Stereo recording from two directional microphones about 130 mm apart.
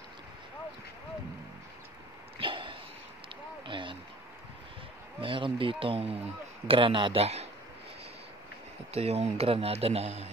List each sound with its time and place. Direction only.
2.3 s a sound: 40° right (ahead or behind)
5.2 s speech: 40° right (ahead or behind)
8.9 s speech: 55° right (ahead or behind)